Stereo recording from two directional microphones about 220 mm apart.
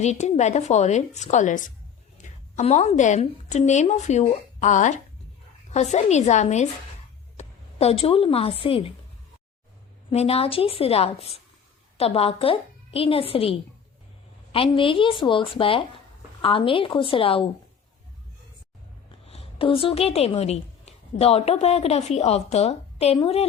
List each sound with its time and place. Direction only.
0.0 s a woman's voice: 30° left (ahead or behind)
10.1 s a woman's voice: 25° left (ahead or behind)
19.2 s a woman's voice: 25° left (ahead or behind)